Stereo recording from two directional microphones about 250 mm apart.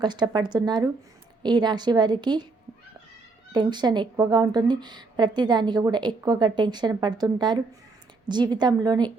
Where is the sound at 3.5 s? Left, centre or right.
Centre.